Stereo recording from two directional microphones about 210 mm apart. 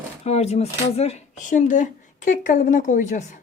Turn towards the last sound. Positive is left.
turn(degrees=35)  # may be behind; listen again after turning